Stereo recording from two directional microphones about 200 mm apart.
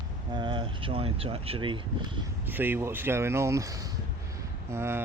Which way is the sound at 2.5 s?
10° right (ahead or behind).